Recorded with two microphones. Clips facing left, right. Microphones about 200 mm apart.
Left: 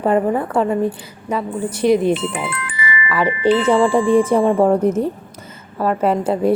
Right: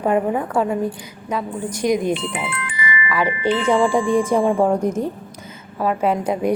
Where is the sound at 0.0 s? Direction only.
10° right (ahead or behind).